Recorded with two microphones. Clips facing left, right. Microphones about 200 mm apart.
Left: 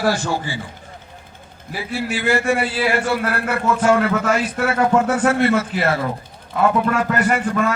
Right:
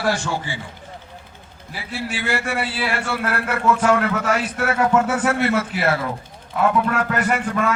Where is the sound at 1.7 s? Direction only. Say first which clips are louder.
Left 4 dB; 45° left (ahead or behind).